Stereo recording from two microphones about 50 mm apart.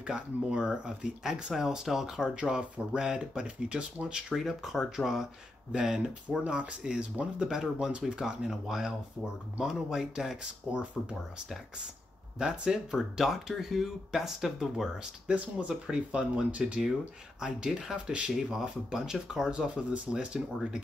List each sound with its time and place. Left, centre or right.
0.0 s speech: centre
4.3 s speech: centre
6.4 s speech: right
7.4 s speech: centre
10.3 s speech: right
12.4 s speech: centre
15.0 s speech: centre
19.7 s speech: right